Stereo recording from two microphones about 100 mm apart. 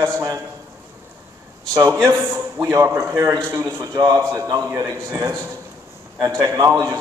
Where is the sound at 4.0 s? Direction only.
40° right (ahead or behind).